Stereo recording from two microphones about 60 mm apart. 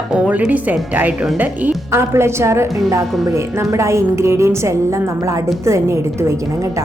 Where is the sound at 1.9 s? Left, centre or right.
Right.